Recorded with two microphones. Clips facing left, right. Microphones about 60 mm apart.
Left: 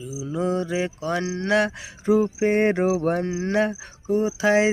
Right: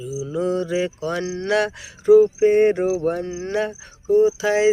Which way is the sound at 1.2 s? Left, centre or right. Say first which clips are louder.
Right 1 dB; left.